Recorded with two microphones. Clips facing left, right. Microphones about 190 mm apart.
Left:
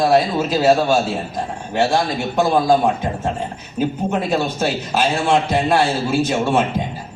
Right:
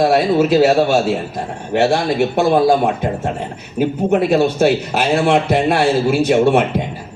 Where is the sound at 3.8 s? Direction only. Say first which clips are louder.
Right 5 dB; 60° right (ahead or behind).